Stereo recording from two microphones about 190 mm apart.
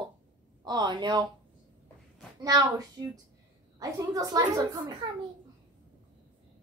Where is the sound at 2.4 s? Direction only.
20° right (ahead or behind).